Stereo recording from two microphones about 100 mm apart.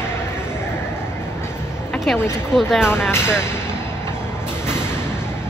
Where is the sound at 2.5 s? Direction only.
5° right (ahead or behind).